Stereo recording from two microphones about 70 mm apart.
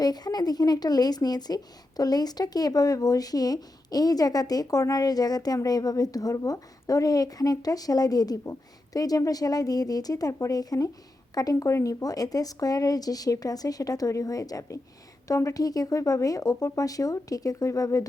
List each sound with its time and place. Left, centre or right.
0.0 s speech: left